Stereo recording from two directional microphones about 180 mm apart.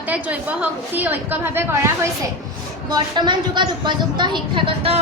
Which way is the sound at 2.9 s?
25° right (ahead or behind).